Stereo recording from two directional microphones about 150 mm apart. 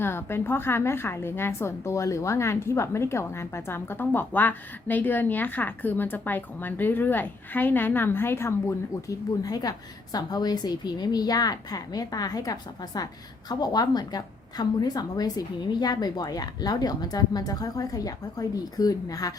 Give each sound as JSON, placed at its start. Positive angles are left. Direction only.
{"t": 0.0, "sound": "a woman's voice", "side_deg": 15}